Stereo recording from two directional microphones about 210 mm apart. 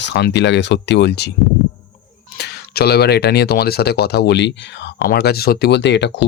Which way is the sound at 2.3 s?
50° left (ahead or behind).